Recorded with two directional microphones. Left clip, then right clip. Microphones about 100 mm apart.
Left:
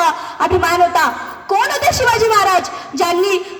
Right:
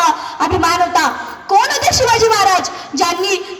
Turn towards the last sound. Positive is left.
turn(degrees=40)  # may be behind; listen again after turning